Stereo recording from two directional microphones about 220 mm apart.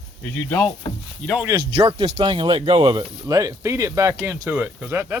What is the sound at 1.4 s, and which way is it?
Speech, 20° right (ahead or behind).